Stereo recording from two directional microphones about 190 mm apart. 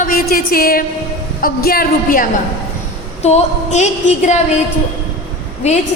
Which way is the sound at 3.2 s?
35° left (ahead or behind).